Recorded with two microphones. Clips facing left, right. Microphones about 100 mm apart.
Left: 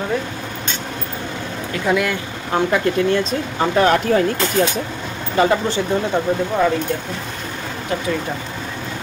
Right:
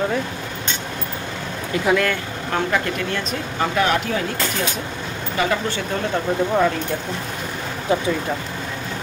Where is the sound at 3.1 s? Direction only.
35° left (ahead or behind).